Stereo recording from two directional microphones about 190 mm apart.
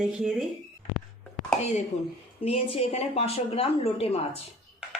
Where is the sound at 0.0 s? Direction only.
5° right (ahead or behind).